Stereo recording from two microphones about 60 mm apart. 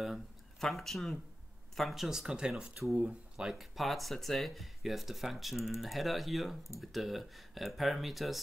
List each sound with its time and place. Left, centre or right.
0.6 s speech: centre; by 3.2 s right
3.3 s speech: centre